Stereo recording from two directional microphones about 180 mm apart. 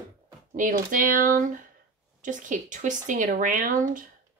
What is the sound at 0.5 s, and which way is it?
A woman's voice, 45° right (ahead or behind).